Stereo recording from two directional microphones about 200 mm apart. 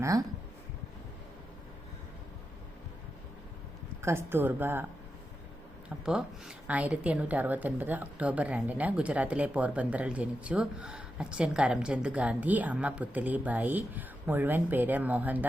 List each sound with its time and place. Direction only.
0.0 s a woman's voice: 15° right (ahead or behind)
4.0 s a woman's voice: 10° right (ahead or behind)
6.1 s a woman's voice: 5° right (ahead or behind)